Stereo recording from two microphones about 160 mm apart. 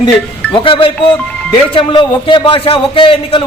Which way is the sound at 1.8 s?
30° left (ahead or behind).